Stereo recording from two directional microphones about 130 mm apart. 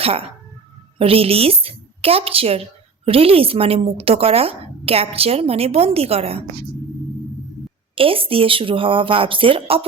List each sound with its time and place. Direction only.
0.0 s a woman's voice: 50° right (ahead or behind)
7.9 s a woman's voice: 45° right (ahead or behind)